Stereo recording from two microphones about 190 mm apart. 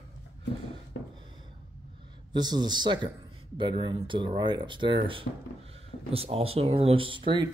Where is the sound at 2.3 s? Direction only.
20° right (ahead or behind).